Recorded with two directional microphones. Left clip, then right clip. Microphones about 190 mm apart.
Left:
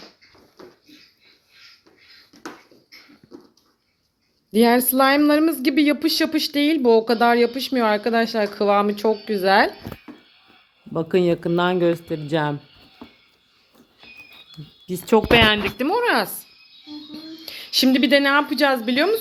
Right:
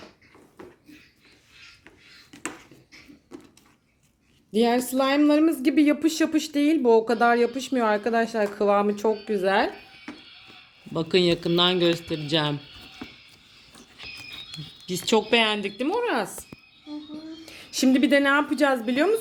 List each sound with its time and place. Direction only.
4.5 s speech: centre (ahead or behind)
10.9 s speech: 10° left (ahead or behind)
14.8 s a woman's voice: 10° left (ahead or behind); by 19.1 s 10° right (ahead or behind)